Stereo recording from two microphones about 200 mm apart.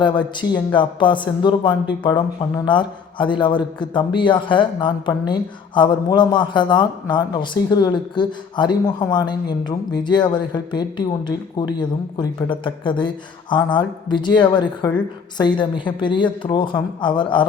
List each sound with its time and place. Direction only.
0.0 s a man's voice: 25° left (ahead or behind)